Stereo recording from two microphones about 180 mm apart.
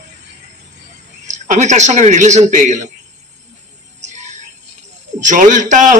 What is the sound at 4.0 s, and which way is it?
Music, 40° right (ahead or behind).